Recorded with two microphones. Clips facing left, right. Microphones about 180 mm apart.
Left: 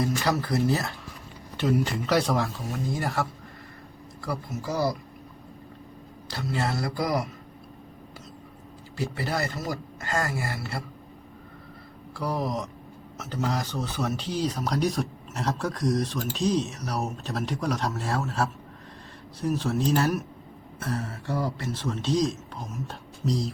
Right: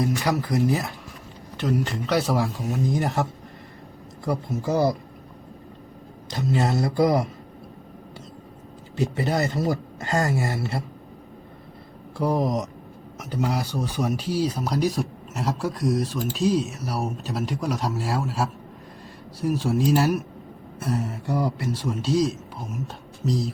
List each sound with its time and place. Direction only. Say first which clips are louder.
0.0 s speech: right 2 dB; 15° right (ahead or behind)
1.5 s speech: even; centre (ahead or behind); by 4.9 s 25° right (ahead or behind)
6.2 s speech: right 5 dB; 20° right (ahead or behind)
9.0 s speech: right 5 dB; 20° right (ahead or behind)
12.1 s speech: right 6 dB; 20° right (ahead or behind); by 23.5 s centre (ahead or behind)